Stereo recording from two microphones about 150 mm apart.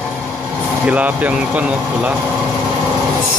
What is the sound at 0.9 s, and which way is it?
Speech, 10° right (ahead or behind).